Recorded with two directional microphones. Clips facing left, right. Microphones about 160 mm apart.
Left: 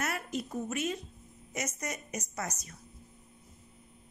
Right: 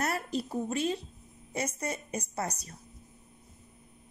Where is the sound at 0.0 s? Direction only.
35° right (ahead or behind).